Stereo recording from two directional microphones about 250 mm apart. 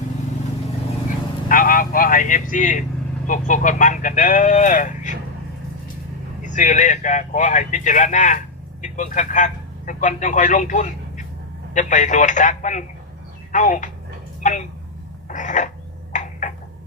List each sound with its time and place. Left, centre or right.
1.5 s speech: left
6.4 s a man's voice: left
15.3 s a sound: left